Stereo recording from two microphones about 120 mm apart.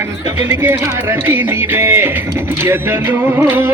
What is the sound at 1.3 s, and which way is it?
Music, 20° right (ahead or behind).